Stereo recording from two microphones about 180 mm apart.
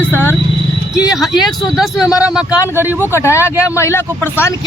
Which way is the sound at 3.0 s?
15° left (ahead or behind).